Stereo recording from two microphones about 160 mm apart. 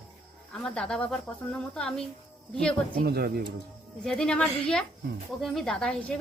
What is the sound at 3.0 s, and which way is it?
Speech, 70° right (ahead or behind).